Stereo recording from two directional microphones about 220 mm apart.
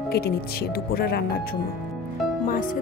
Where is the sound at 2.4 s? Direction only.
40° left (ahead or behind).